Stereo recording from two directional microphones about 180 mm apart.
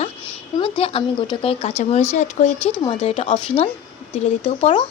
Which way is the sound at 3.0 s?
35° left (ahead or behind).